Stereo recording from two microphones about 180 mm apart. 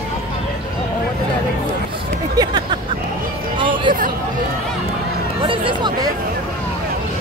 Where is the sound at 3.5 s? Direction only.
25° right (ahead or behind).